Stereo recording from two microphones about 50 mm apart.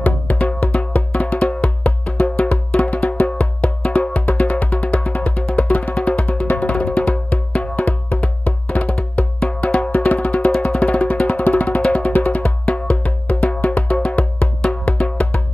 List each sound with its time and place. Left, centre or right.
0.0 s music: left
9.8 s music: left